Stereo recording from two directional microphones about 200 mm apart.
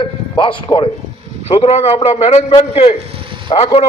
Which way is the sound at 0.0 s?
25° left (ahead or behind).